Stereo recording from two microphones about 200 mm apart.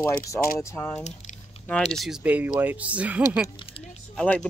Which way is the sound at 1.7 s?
Centre (ahead or behind).